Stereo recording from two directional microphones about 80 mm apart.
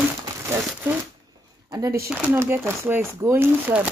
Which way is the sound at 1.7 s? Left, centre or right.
Right.